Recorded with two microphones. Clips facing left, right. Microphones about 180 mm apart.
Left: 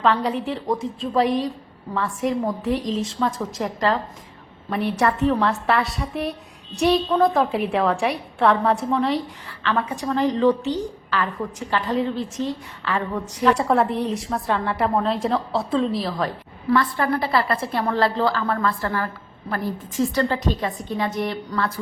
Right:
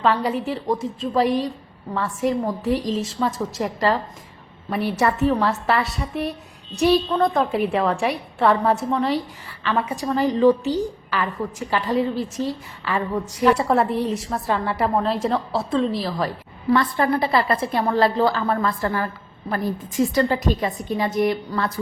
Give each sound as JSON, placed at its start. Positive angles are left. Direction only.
{"t": 0.0, "sound": "a woman's voice", "side_deg": -5}
{"t": 16.7, "sound": "a woman's voice", "side_deg": -20}